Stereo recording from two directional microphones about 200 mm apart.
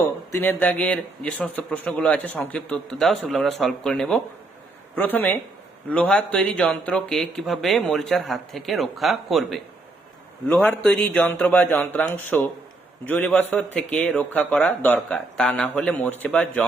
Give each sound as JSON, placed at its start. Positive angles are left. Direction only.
{"t": 0.3, "sound": "a man's voice", "side_deg": 10}